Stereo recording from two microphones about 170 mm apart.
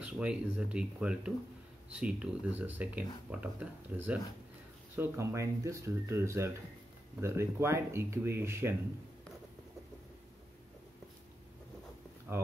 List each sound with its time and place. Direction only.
0.0 s speech: 5° right (ahead or behind)